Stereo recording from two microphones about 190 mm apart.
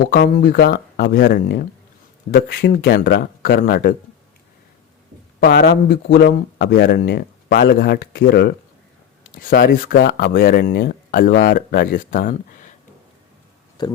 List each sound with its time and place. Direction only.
0.2 s speech: 50° left (ahead or behind)
5.4 s speech: 60° left (ahead or behind); by 12.4 s 45° left (ahead or behind)
13.8 s speech: 20° left (ahead or behind)